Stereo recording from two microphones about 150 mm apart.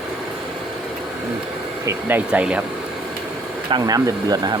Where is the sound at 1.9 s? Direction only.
15° right (ahead or behind).